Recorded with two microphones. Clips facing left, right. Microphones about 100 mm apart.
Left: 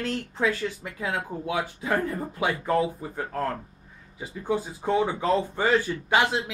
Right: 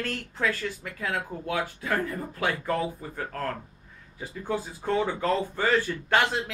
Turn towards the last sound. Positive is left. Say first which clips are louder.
# left 1 dB
turn(degrees=10)  # may be behind; listen again after turning